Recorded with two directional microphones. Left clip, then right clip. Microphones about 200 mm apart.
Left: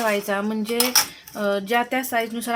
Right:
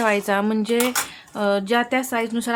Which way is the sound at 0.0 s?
15° right (ahead or behind).